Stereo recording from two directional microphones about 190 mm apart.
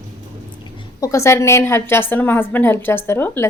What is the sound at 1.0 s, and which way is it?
A woman's voice, 15° left (ahead or behind).